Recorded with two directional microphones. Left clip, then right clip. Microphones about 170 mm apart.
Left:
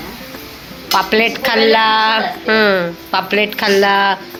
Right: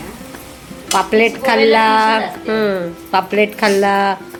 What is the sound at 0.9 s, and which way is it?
Speech, 5° right (ahead or behind).